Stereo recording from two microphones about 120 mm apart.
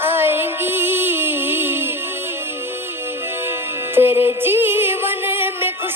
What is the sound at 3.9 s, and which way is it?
Music, 20° right (ahead or behind).